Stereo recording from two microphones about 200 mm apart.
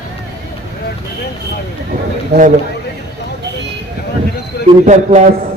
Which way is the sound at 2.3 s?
40° right (ahead or behind).